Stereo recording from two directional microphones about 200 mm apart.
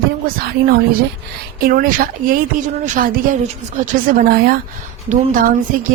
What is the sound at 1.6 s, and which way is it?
A woman's voice, 45° right (ahead or behind).